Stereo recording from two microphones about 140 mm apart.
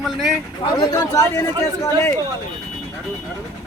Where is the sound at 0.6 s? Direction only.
30° left (ahead or behind).